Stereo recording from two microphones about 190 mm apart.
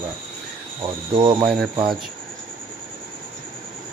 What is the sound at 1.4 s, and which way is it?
Speech, centre (ahead or behind).